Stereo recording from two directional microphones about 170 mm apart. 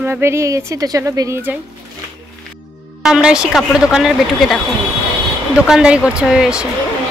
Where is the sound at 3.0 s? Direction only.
5° right (ahead or behind).